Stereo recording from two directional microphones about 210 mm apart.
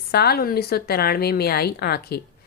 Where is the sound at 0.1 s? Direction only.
50° left (ahead or behind).